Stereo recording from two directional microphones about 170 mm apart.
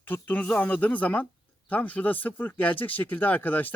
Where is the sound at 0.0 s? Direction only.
10° left (ahead or behind).